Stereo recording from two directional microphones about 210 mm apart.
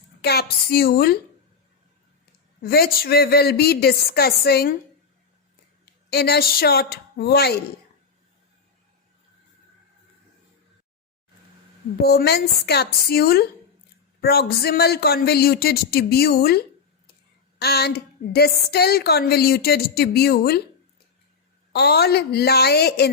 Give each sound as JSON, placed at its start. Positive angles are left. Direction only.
{"t": 0.2, "sound": "a woman's voice", "side_deg": 50}
{"t": 2.6, "sound": "a woman's voice", "side_deg": 45}
{"t": 5.8, "sound": "a woman's voice", "side_deg": 50}
{"t": 12.0, "sound": "a woman's voice", "side_deg": 50}
{"t": 21.7, "sound": "a woman's voice", "side_deg": 50}